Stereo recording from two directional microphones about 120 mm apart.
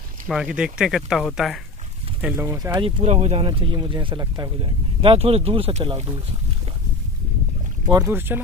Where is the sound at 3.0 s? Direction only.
65° right (ahead or behind).